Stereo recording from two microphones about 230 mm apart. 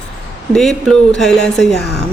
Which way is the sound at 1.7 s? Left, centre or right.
Left.